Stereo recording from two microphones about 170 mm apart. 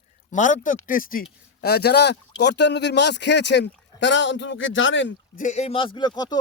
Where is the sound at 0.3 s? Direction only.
50° left (ahead or behind).